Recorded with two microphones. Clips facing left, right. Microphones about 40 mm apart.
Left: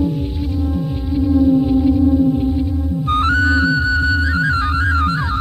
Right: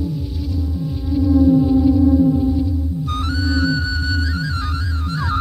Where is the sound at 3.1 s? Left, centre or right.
Left.